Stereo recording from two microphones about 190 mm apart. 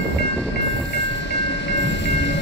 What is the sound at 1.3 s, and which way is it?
Train, 70° left (ahead or behind).